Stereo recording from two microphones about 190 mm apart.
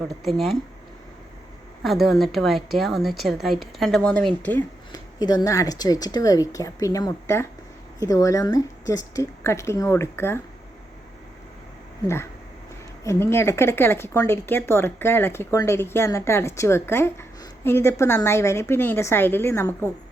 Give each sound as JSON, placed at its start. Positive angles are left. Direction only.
{"t": 0.1, "sound": "a woman's voice", "side_deg": 0}
{"t": 1.8, "sound": "a woman's voice", "side_deg": 0}
{"t": 4.9, "sound": "a woman's voice", "side_deg": 20}
{"t": 12.0, "sound": "speech", "side_deg": 15}